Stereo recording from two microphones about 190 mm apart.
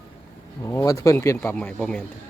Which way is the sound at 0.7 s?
15° left (ahead or behind).